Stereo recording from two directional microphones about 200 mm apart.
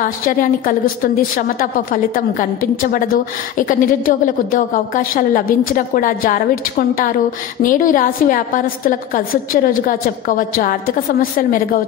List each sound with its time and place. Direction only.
0.0 s a woman's voice: 45° left (ahead or behind)